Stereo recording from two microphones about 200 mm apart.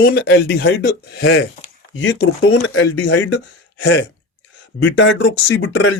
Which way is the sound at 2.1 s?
65° left (ahead or behind).